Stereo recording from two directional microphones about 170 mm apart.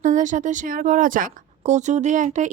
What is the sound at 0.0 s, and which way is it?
A woman's voice, 50° right (ahead or behind).